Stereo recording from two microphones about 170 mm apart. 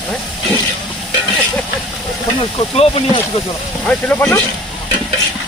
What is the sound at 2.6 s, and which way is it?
Speech, 30° left (ahead or behind).